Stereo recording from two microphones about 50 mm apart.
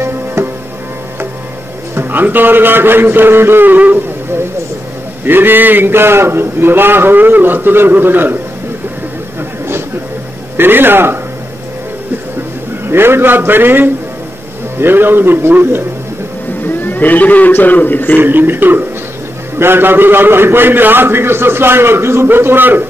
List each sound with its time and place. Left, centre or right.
0.0 s music: right
2.0 s a man's voice: right
5.2 s a man's voice: right
10.6 s a man's voice: right
12.8 s a man's voice: right
16.6 s a sound: left
17.5 s a man's voice: left
18.2 s a man's voice: right